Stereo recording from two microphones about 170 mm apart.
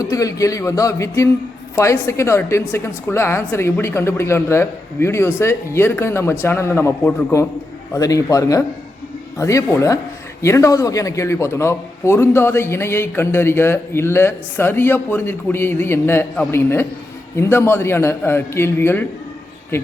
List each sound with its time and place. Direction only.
0.0 s a man's voice: 20° left (ahead or behind)